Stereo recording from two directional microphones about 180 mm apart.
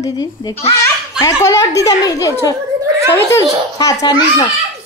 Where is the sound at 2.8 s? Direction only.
15° right (ahead or behind).